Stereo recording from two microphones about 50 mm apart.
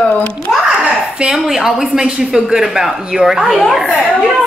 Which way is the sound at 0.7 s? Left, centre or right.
Centre.